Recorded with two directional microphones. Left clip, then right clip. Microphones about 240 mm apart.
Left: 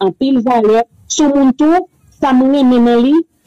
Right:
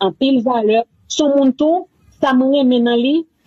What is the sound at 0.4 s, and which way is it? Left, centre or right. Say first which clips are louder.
Speech: left 6 dB; left.